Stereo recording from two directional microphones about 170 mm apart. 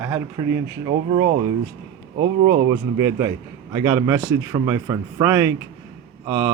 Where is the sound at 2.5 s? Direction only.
20° right (ahead or behind).